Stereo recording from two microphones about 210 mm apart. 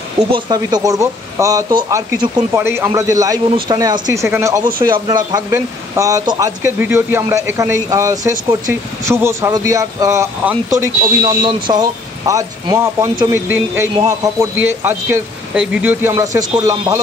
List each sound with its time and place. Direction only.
0.5 s speech: 20° right (ahead or behind)